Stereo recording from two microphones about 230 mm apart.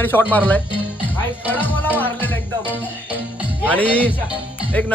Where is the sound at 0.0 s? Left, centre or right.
Centre.